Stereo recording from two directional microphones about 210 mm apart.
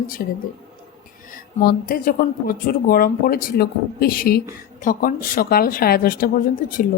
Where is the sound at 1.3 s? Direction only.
40° left (ahead or behind).